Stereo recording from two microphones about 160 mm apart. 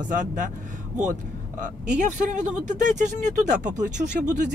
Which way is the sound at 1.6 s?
50° right (ahead or behind).